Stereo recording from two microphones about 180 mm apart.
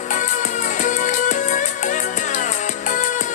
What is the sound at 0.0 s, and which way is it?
Music, 45° left (ahead or behind).